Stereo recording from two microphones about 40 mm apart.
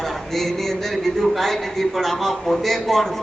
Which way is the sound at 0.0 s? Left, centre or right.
Centre.